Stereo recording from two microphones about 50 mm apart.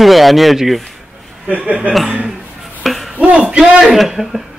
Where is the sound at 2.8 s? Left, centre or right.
Centre.